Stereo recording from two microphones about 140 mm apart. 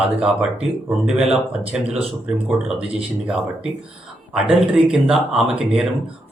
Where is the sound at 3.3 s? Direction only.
5° right (ahead or behind).